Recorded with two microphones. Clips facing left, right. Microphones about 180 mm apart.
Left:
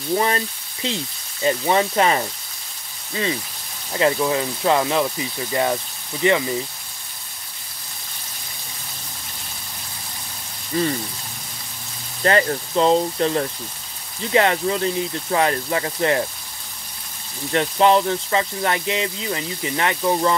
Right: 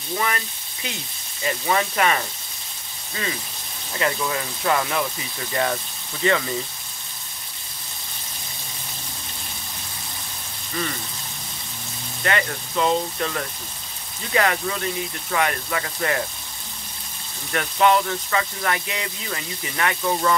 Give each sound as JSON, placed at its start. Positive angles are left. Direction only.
{"t": 0.1, "sound": "speech", "side_deg": 30}
{"t": 3.9, "sound": "speech", "side_deg": 25}
{"t": 10.7, "sound": "speech", "side_deg": 30}
{"t": 12.2, "sound": "speech", "side_deg": 35}
{"t": 17.5, "sound": "speech", "side_deg": 30}